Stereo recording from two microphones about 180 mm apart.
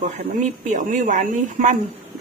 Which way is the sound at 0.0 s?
40° right (ahead or behind).